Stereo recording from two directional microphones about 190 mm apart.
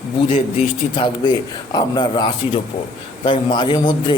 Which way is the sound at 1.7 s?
20° left (ahead or behind).